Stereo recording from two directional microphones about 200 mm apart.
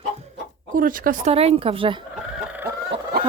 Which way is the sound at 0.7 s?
45° right (ahead or behind).